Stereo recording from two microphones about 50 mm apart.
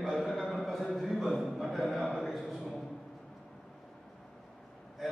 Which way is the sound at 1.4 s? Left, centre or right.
Centre.